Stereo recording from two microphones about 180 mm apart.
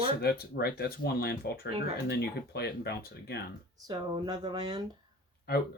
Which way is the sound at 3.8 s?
25° right (ahead or behind).